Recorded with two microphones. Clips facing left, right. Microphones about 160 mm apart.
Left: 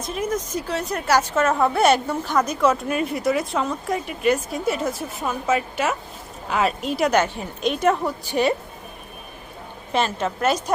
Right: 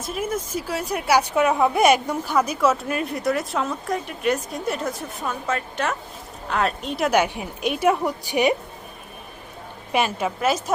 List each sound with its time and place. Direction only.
0.0 s a woman's voice: 5° right (ahead or behind)
7.1 s a woman's voice: 10° right (ahead or behind)
9.9 s a woman's voice: 10° right (ahead or behind)